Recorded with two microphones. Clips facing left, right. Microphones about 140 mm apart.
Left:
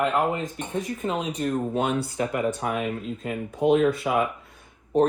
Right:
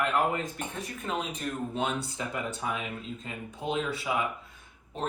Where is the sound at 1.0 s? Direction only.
35° left (ahead or behind); by 4.3 s 50° left (ahead or behind).